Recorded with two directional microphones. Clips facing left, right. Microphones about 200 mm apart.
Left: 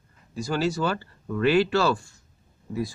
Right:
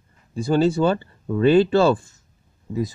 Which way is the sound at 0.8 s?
25° right (ahead or behind).